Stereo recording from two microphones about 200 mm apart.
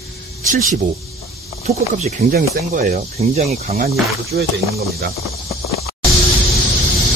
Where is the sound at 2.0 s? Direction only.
45° right (ahead or behind).